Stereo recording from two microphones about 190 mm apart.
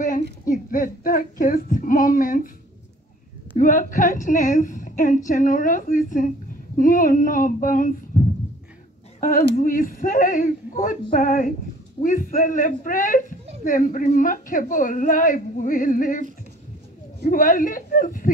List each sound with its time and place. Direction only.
0.5 s a woman's voice: 45° left (ahead or behind)
3.5 s a woman's voice: 45° left (ahead or behind)
9.2 s a woman's voice: 45° left (ahead or behind)
17.3 s a woman's voice: 45° left (ahead or behind)